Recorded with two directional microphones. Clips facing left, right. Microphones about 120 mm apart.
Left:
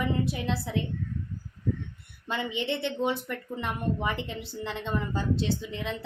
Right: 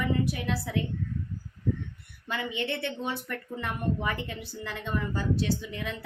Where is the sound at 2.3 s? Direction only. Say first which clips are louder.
Left 2 dB; 20° left (ahead or behind).